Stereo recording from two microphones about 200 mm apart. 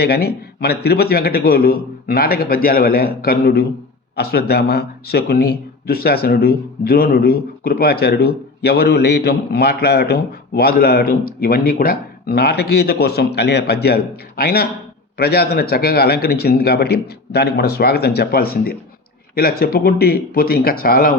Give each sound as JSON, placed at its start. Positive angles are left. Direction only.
{"t": 0.0, "sound": "speech", "side_deg": 50}